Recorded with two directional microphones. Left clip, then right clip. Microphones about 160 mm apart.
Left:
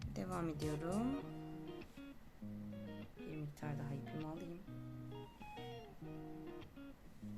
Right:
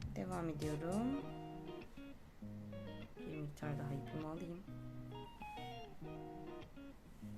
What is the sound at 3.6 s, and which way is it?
Music, 25° right (ahead or behind).